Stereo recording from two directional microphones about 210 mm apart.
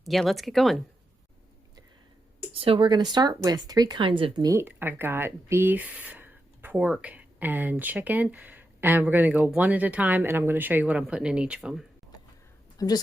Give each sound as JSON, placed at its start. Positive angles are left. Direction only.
{"t": 0.0, "sound": "speech", "side_deg": 0}
{"t": 2.5, "sound": "speech", "side_deg": -25}
{"t": 12.8, "sound": "a woman's voice", "side_deg": 15}